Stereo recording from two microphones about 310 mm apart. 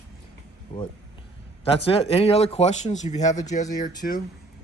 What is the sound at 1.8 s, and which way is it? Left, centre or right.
Speech, centre.